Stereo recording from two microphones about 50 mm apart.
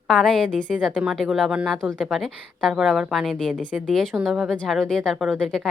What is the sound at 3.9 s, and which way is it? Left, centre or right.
A woman's voice, centre.